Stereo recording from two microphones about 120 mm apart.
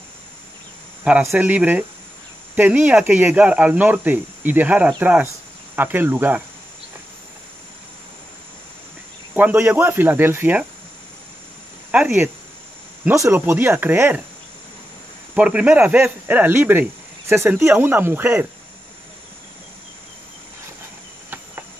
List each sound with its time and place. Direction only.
1.2 s speech: 20° right (ahead or behind)
9.3 s speech: 15° right (ahead or behind)
11.9 s speech: 10° right (ahead or behind)
13.1 s speech: 25° right (ahead or behind)
15.3 s speech: 10° right (ahead or behind)